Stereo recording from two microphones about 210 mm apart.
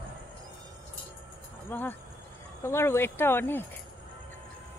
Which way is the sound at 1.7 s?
10° left (ahead or behind).